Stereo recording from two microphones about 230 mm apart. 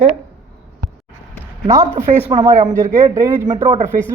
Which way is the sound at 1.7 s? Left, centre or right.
Centre.